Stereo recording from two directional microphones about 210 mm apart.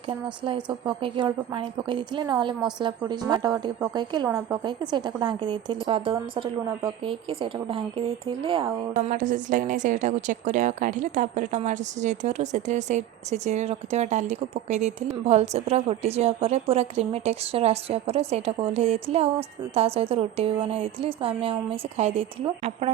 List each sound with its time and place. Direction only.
0.4 s a woman's voice: 25° right (ahead or behind)
9.0 s a woman's voice: 35° right (ahead or behind)